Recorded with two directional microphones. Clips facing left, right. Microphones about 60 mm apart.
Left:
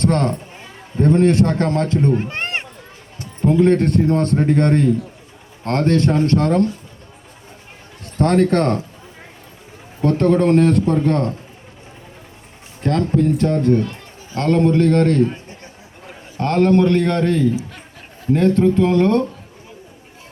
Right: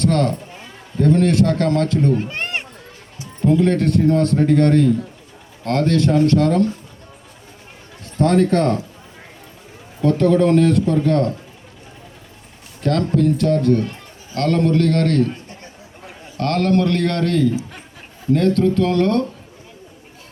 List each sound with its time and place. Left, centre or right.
0.0 s a man's voice: left
8.2 s a man's voice: left
10.0 s a man's voice: left
12.8 s a man's voice: left